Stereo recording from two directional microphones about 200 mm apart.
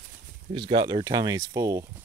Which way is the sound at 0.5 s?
25° right (ahead or behind).